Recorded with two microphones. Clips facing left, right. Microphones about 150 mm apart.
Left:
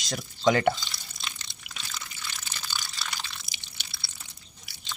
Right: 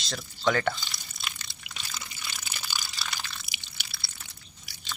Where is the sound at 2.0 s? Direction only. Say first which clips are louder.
Even; 10° right (ahead or behind).